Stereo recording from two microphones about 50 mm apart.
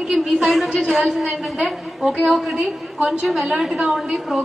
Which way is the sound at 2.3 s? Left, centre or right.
Centre.